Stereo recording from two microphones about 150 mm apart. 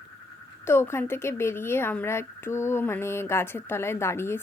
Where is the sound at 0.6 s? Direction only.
15° left (ahead or behind).